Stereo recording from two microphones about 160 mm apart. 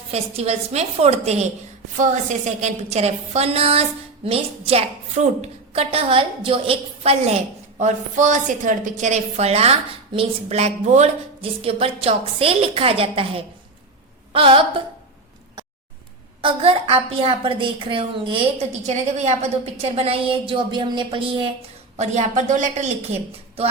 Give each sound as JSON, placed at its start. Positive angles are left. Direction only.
{"t": 0.1, "sound": "a woman's voice", "side_deg": -40}
{"t": 7.8, "sound": "a woman's voice", "side_deg": -50}
{"t": 16.4, "sound": "a woman's voice", "side_deg": -35}
{"t": 18.7, "sound": "a woman's voice", "side_deg": -45}
{"t": 21.9, "sound": "a woman's voice", "side_deg": -45}